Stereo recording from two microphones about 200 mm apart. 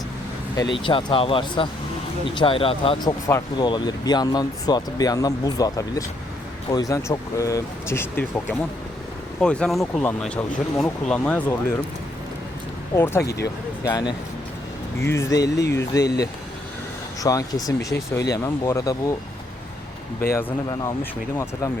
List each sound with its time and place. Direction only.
0.9 s speech: 25° left (ahead or behind); by 11.5 s 5° left (ahead or behind)
13.8 s speech: 20° left (ahead or behind)
20.3 s speech: 15° left (ahead or behind)